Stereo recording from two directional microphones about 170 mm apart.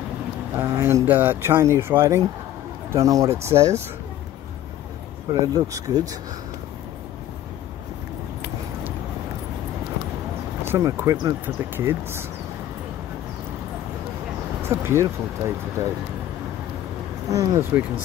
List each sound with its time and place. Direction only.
0.6 s speech: 15° right (ahead or behind)
5.3 s speech: 20° right (ahead or behind)
10.6 s speech: 15° right (ahead or behind)
14.7 s speech: 15° right (ahead or behind)
17.3 s speech: 20° right (ahead or behind)